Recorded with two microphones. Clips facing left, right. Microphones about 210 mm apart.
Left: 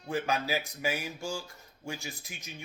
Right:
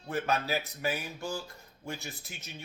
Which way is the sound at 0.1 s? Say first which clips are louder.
Even; 15° left (ahead or behind).